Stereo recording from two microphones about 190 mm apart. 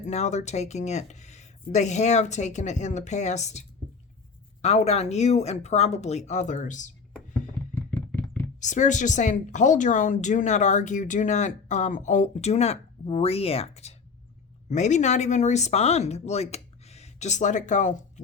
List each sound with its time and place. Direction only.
0.0 s speech: 35° left (ahead or behind)
7.9 s knock: 10° left (ahead or behind)
8.6 s speech: 40° left (ahead or behind)